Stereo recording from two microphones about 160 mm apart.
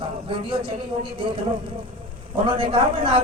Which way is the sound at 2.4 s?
35° right (ahead or behind).